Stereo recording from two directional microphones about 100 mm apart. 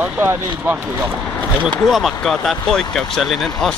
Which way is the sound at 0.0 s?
20° right (ahead or behind).